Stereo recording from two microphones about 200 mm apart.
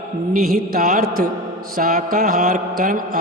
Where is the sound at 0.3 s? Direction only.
45° right (ahead or behind).